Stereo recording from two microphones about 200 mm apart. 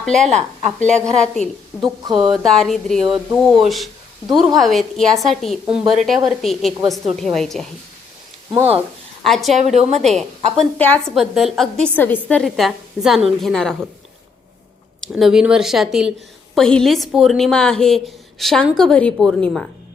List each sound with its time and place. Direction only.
0.0 s a woman's voice: centre (ahead or behind)
9.2 s a woman's voice: centre (ahead or behind)
9.6 s a woman's voice: 35° right (ahead or behind)
10.6 s a woman's voice: 10° left (ahead or behind)
15.1 s a woman's voice: 5° right (ahead or behind)